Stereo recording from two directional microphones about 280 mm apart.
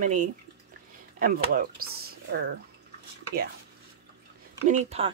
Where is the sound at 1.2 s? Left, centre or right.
Right.